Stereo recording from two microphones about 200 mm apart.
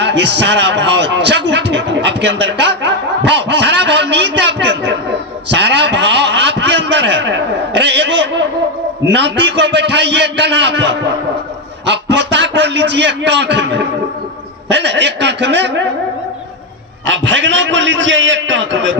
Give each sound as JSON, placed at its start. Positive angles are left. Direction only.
{"t": 0.0, "sound": "a sound", "side_deg": -60}
{"t": 9.0, "sound": "a man's voice", "side_deg": -60}
{"t": 17.1, "sound": "a man's voice", "side_deg": -70}